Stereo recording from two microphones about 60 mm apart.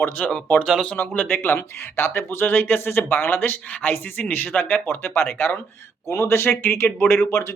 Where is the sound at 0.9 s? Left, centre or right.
Left.